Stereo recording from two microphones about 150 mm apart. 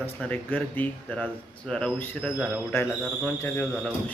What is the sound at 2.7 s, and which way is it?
Speech, 15° left (ahead or behind).